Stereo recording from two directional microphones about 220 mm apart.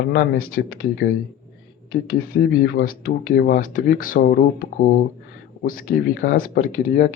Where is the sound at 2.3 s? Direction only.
45° left (ahead or behind).